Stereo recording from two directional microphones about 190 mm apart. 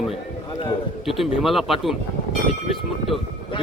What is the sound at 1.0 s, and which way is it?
Speech, centre (ahead or behind).